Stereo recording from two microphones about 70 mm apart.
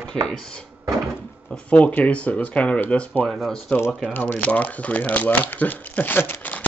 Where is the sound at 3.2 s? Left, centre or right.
Centre.